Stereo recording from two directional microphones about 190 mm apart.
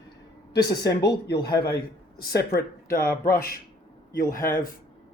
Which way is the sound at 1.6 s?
55° left (ahead or behind).